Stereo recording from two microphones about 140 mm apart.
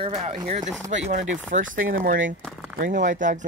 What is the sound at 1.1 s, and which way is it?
Speech, 70° right (ahead or behind).